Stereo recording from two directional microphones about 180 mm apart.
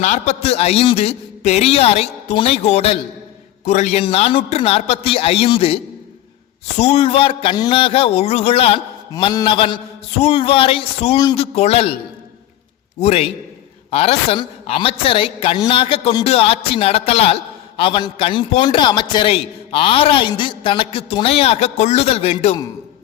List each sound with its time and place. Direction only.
0.0 s a man's voice: 40° left (ahead or behind)
11.2 s a man's voice: 20° left (ahead or behind)
11.5 s a man's voice: 35° left (ahead or behind)
13.0 s a man's voice: 35° left (ahead or behind)